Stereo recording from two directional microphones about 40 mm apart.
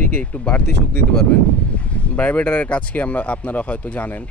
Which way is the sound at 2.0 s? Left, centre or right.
Left.